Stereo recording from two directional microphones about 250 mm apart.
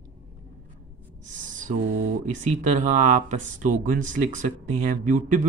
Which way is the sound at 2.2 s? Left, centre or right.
Right.